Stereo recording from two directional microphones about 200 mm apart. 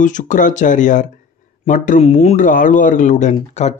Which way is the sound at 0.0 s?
40° left (ahead or behind).